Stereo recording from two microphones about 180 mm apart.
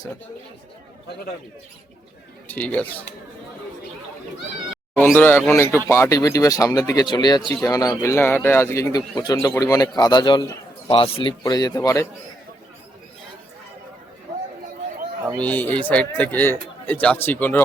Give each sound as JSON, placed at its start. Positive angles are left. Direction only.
{"t": 2.5, "sound": "speech", "side_deg": 10}
{"t": 4.9, "sound": "a man's voice", "side_deg": 10}
{"t": 15.4, "sound": "speech", "side_deg": 10}